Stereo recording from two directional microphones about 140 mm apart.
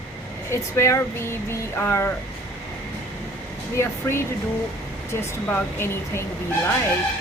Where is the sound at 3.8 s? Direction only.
20° left (ahead or behind).